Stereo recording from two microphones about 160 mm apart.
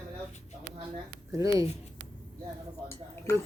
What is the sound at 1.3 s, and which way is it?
Speech, 20° right (ahead or behind).